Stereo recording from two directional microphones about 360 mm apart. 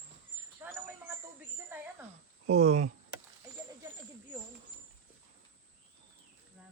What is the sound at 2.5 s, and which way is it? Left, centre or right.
Speech, centre.